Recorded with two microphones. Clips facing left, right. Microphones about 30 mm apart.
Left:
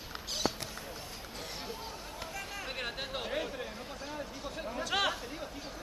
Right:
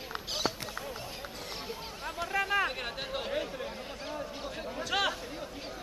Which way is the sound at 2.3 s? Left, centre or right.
Right.